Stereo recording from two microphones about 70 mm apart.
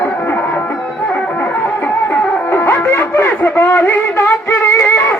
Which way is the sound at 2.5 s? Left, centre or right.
Left.